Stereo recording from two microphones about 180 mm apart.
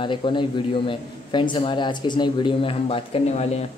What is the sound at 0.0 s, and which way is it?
A man's voice, 25° left (ahead or behind).